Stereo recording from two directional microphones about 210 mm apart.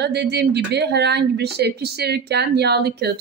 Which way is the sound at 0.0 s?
50° right (ahead or behind).